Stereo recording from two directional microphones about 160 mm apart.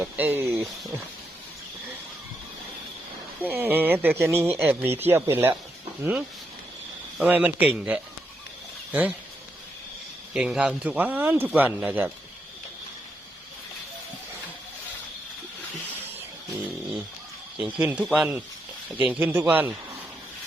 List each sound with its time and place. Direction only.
0.0 s speech: 10° right (ahead or behind)
3.4 s speech: 15° right (ahead or behind)
10.3 s speech: 5° right (ahead or behind)
17.6 s speech: 10° right (ahead or behind)